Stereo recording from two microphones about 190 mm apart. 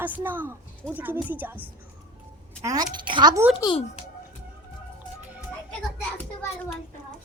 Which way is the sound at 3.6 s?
30° left (ahead or behind).